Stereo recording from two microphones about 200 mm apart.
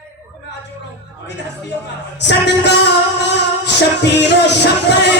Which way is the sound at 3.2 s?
60° left (ahead or behind).